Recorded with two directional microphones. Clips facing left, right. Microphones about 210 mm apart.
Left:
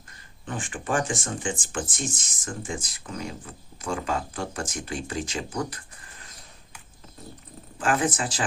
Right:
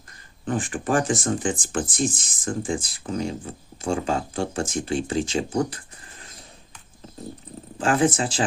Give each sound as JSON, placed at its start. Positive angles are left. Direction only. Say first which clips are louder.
{"t": 0.4, "sound": "speech", "louder": "right 6 dB", "side_deg": -35}
{"t": 7.8, "sound": "speech", "louder": "right 4 dB", "side_deg": -25}